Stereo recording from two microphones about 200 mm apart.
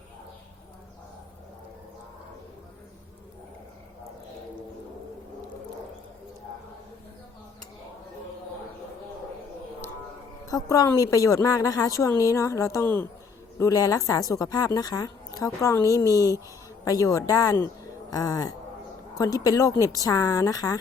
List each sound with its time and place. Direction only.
10.5 s a woman's voice: 15° left (ahead or behind)